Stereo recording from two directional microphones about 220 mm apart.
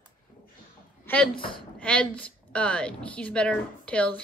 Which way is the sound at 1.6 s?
5° left (ahead or behind).